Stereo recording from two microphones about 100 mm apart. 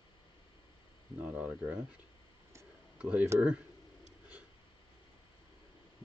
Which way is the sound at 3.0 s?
15° right (ahead or behind).